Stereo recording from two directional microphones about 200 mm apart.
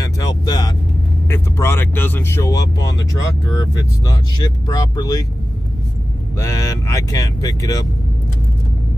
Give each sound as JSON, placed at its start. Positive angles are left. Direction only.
{"t": 0.0, "sound": "vehicle", "side_deg": 20}
{"t": 1.3, "sound": "speech", "side_deg": 10}
{"t": 6.3, "sound": "speech", "side_deg": 15}